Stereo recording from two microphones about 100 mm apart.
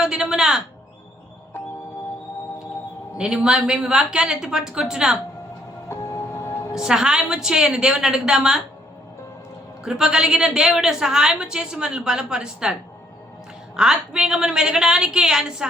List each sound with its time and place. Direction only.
0.0 s speech: 5° right (ahead or behind)
3.2 s a woman's voice: 10° right (ahead or behind)
5.9 s vehicle: 30° left (ahead or behind)
6.7 s a woman's voice: 5° right (ahead or behind)
9.8 s a woman's voice: 5° right (ahead or behind)
13.7 s a woman's voice: 5° right (ahead or behind)